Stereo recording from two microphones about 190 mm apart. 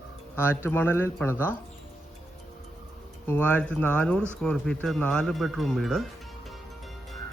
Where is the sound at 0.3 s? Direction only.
10° left (ahead or behind).